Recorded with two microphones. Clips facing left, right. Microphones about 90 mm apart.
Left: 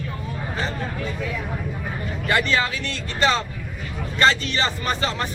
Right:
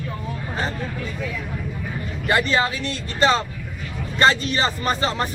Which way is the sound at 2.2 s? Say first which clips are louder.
Right 2 dB; 30° right (ahead or behind).